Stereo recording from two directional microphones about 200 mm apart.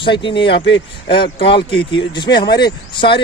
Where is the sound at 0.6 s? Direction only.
60° left (ahead or behind).